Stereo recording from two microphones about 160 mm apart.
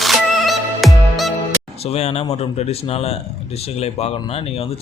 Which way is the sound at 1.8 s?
40° left (ahead or behind).